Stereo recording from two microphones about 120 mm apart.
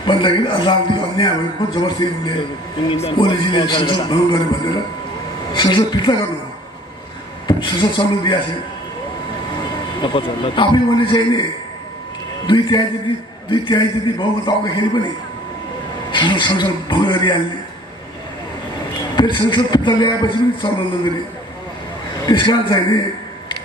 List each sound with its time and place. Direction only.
0.0 s a man's voice: 45° left (ahead or behind)
2.9 s a man's voice: 50° left (ahead or behind)
7.4 s speech: 40° left (ahead or behind)
10.0 s a man's voice: 45° left (ahead or behind)
12.4 s speech: 40° left (ahead or behind)
16.1 s speech: 40° left (ahead or behind)
19.1 s speech: 40° left (ahead or behind)
22.2 s speech: 40° left (ahead or behind)